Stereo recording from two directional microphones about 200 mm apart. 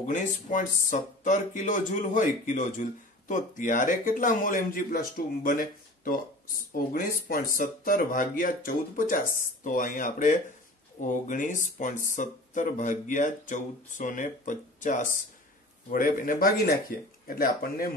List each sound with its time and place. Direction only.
0.0 s speech: 40° left (ahead or behind)